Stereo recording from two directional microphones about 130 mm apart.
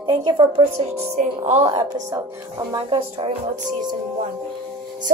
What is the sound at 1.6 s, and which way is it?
A woman's voice, 45° right (ahead or behind).